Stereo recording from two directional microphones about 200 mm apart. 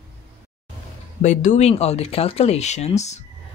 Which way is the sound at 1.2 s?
40° left (ahead or behind).